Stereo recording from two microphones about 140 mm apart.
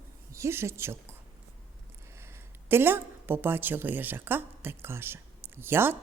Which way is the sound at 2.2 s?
15° right (ahead or behind).